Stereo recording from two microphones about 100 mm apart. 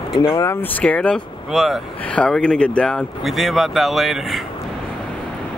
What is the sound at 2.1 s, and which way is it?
Speech, 10° left (ahead or behind).